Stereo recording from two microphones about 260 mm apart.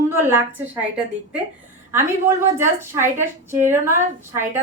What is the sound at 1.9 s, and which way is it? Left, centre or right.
A woman's voice, centre.